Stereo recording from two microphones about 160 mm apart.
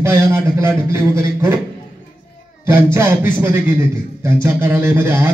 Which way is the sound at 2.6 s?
15° right (ahead or behind).